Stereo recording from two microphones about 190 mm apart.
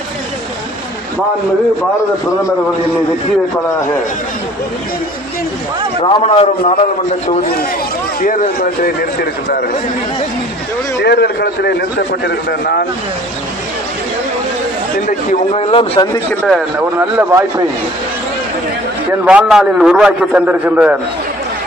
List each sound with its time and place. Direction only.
6.0 s a man's voice: 30° left (ahead or behind)
8.2 s a man's voice: 45° left (ahead or behind)
11.0 s a man's voice: 60° left (ahead or behind)
15.0 s a man's voice: 30° left (ahead or behind)
16.3 s a man's voice: centre (ahead or behind)
16.7 s speech: 15° right (ahead or behind)
19.2 s a man's voice: 5° right (ahead or behind)